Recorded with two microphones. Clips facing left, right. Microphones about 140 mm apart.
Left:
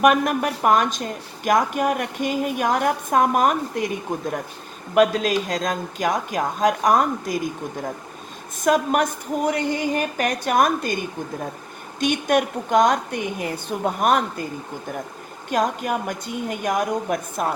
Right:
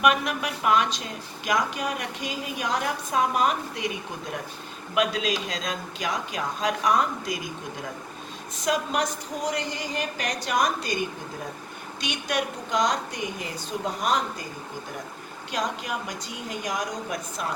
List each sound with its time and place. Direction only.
0.0 s a woman's voice: 50° left (ahead or behind)
8.6 s a woman's voice: 50° left (ahead or behind)
15.4 s a woman's voice: 50° left (ahead or behind)